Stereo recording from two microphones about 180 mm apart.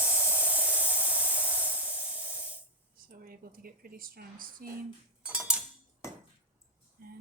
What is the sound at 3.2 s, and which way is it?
A woman's voice, 50° right (ahead or behind).